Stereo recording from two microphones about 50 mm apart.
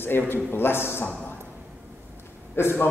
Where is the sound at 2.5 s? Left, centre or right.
Left.